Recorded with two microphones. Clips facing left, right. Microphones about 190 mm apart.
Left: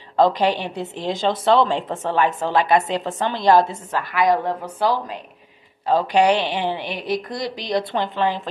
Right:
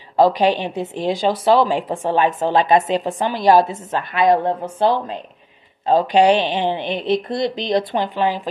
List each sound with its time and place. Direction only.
0.1 s a woman's voice: 10° right (ahead or behind)
5.9 s a woman's voice: 15° right (ahead or behind)